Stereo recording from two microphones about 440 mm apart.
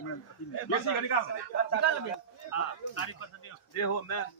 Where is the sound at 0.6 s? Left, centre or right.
Left.